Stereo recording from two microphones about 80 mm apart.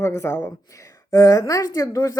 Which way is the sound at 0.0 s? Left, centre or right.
Left.